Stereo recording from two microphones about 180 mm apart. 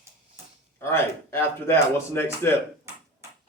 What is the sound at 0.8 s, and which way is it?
A man's voice, 15° left (ahead or behind).